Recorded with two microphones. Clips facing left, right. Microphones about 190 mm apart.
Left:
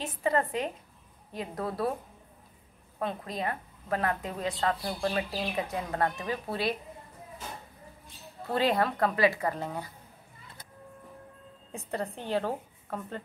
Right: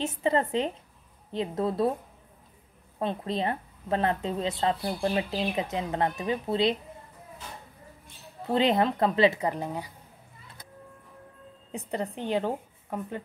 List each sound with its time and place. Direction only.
0.0 s a woman's voice: 25° right (ahead or behind)
3.0 s a woman's voice: 25° right (ahead or behind)
8.5 s a woman's voice: 20° right (ahead or behind)
11.7 s a woman's voice: 15° right (ahead or behind)